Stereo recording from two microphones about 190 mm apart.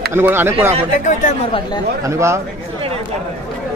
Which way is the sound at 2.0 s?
15° right (ahead or behind).